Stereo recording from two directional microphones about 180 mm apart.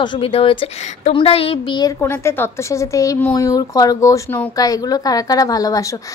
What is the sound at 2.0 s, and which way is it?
A woman's voice, 10° left (ahead or behind).